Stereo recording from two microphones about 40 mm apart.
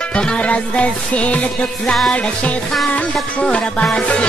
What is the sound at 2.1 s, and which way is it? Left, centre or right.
Music, left.